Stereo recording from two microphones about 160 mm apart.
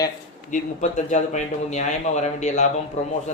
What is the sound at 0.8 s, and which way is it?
A man's voice, 50° left (ahead or behind).